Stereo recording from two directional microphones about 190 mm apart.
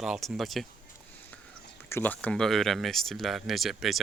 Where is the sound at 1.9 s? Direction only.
10° left (ahead or behind).